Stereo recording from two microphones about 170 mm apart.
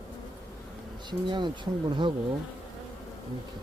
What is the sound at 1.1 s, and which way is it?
Speech, 25° right (ahead or behind).